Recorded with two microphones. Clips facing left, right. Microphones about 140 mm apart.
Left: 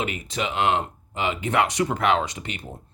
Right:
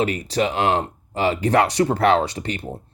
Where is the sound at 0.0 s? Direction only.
35° right (ahead or behind).